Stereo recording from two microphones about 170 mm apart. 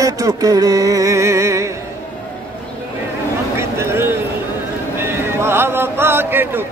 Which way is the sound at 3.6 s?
15° right (ahead or behind).